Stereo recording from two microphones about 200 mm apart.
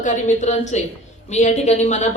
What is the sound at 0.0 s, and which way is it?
A woman's voice, 40° left (ahead or behind).